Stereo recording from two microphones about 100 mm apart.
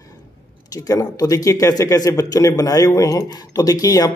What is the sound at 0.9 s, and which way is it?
Speech, 35° left (ahead or behind).